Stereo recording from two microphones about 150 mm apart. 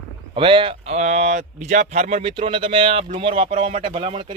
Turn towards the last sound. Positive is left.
turn(degrees=-35)  # may be behind; listen again after turning